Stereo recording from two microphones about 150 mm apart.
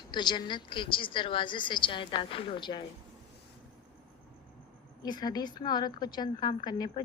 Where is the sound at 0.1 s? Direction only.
30° left (ahead or behind).